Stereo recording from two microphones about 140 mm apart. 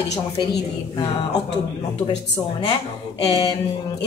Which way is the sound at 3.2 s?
25° left (ahead or behind).